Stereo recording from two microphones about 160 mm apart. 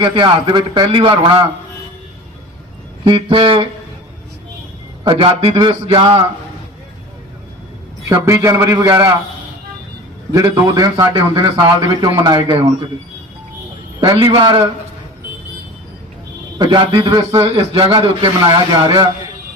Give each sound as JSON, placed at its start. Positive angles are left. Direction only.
{"t": 0.0, "sound": "a man's voice", "side_deg": -30}
{"t": 3.0, "sound": "a man's voice", "side_deg": -35}
{"t": 5.0, "sound": "a man's voice", "side_deg": -35}
{"t": 8.1, "sound": "a man's voice", "side_deg": -20}
{"t": 10.3, "sound": "a man's voice", "side_deg": -25}
{"t": 14.0, "sound": "a man's voice", "side_deg": -30}
{"t": 16.6, "sound": "a man's voice", "side_deg": -30}
{"t": 17.4, "sound": "a man's voice", "side_deg": -35}